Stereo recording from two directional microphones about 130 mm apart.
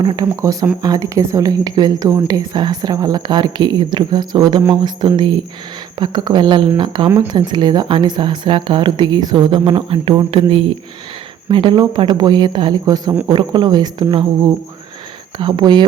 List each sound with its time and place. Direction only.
0.2 s speech: 25° right (ahead or behind)
15.4 s speech: 35° right (ahead or behind)